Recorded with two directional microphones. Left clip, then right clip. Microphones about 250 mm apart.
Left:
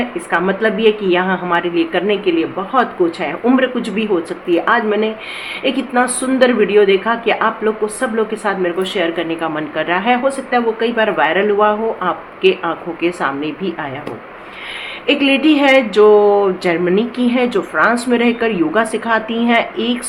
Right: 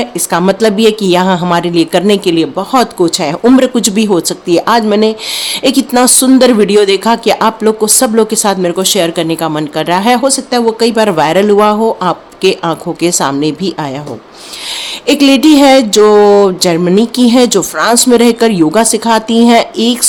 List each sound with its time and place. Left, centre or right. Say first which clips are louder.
0.0 s speech: right 5 dB; right
15.0 s speech: right 6 dB; right